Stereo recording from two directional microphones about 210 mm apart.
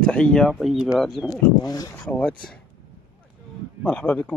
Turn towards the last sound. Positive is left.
turn(degrees=5)  # may be behind; listen again after turning